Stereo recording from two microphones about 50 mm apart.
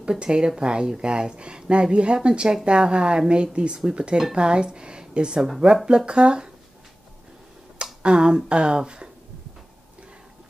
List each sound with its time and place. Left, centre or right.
0.0 s speech: centre
7.8 s speech: centre